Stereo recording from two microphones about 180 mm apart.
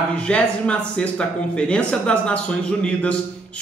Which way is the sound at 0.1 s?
5° left (ahead or behind).